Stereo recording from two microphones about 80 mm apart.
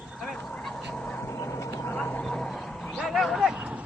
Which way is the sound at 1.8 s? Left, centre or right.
Centre.